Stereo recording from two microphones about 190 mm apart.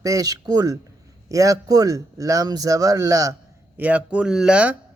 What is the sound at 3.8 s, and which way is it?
Speech, 5° right (ahead or behind).